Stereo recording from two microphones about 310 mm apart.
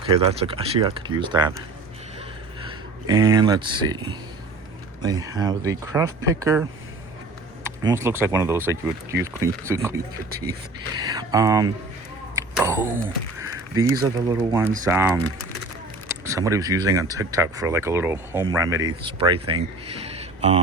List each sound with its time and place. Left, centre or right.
0.0 s speech: centre
2.6 s speech: centre
7.8 s speech: centre
11.0 s speech: centre
12.4 s a sound: centre
14.0 s speech: centre
16.2 s speech: centre